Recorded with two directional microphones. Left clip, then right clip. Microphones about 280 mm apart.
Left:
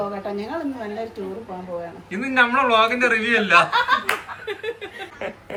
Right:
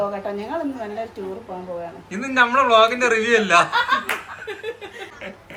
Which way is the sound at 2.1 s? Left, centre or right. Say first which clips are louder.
Right 1 dB; centre.